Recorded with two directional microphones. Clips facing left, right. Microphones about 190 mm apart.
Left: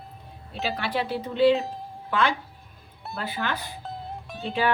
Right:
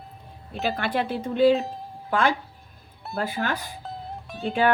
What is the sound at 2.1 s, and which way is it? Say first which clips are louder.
Speech: right 2 dB; 45° right (ahead or behind).